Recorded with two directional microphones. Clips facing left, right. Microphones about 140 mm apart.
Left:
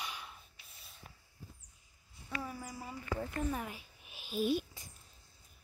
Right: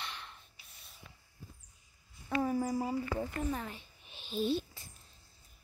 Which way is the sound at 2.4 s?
45° right (ahead or behind).